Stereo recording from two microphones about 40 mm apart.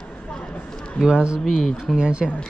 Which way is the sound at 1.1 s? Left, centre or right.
Right.